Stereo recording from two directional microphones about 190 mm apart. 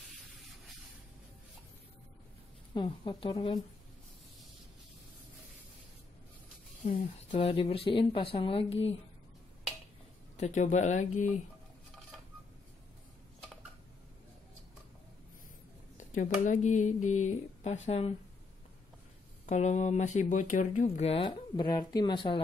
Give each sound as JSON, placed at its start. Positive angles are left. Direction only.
{"t": 2.7, "sound": "speech", "side_deg": 25}
{"t": 6.9, "sound": "speech", "side_deg": 30}
{"t": 10.3, "sound": "speech", "side_deg": 40}
{"t": 16.0, "sound": "speech", "side_deg": 40}
{"t": 19.4, "sound": "speech", "side_deg": 40}